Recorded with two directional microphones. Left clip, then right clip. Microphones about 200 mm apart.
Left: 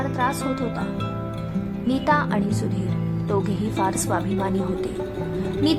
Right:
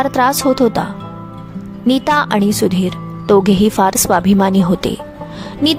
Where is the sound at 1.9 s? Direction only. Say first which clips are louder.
Right 8 dB; 40° right (ahead or behind).